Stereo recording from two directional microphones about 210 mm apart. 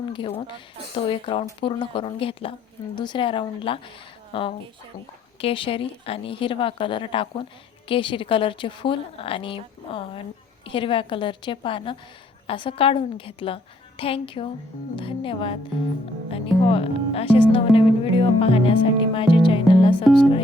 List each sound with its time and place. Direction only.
0.1 s a woman's voice: 25° left (ahead or behind)